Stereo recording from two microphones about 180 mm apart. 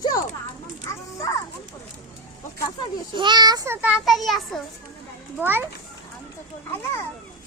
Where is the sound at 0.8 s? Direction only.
20° left (ahead or behind).